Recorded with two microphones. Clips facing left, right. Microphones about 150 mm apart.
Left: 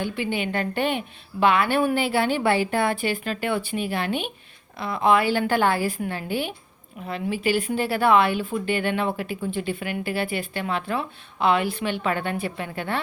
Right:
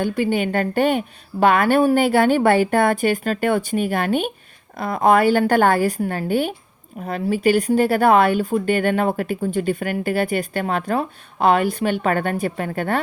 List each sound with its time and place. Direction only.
0.0 s speech: 45° right (ahead or behind)